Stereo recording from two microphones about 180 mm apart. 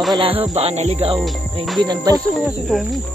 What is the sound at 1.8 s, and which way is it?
Music, 20° right (ahead or behind).